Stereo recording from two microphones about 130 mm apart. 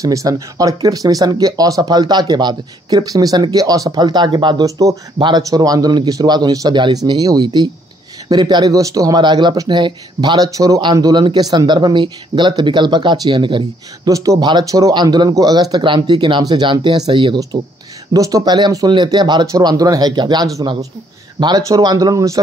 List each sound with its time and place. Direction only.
0.0 s speech: 25° right (ahead or behind)
14.1 s speech: 25° right (ahead or behind)